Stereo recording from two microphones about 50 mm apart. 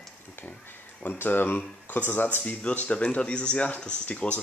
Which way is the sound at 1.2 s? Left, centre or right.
Left.